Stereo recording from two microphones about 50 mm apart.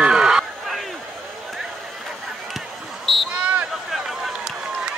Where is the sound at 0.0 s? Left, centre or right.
Centre.